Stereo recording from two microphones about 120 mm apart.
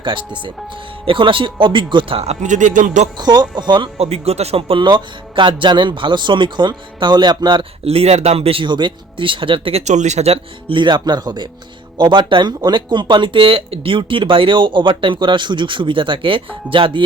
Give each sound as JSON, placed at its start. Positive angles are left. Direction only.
{"t": 0.0, "sound": "a man's voice", "side_deg": -40}
{"t": 3.2, "sound": "a man's voice", "side_deg": -35}
{"t": 3.9, "sound": "speech", "side_deg": -60}
{"t": 4.8, "sound": "a man's voice", "side_deg": -40}
{"t": 7.9, "sound": "speech", "side_deg": -60}
{"t": 9.8, "sound": "speech", "side_deg": -75}